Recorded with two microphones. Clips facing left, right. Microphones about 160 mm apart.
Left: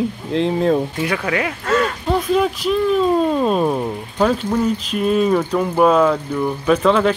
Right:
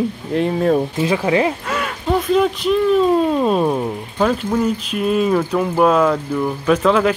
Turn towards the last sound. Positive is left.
turn(degrees=-5)  # may be behind; listen again after turning